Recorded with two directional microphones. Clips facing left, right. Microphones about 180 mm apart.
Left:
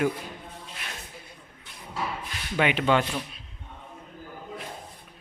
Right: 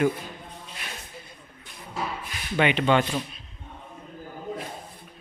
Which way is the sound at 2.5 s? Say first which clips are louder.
Right 2 dB; 5° left (ahead or behind).